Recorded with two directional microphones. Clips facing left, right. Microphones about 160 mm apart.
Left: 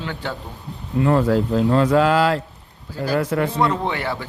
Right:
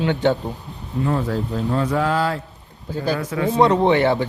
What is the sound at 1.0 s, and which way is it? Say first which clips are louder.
Speech: left 5 dB; 75° left (ahead or behind).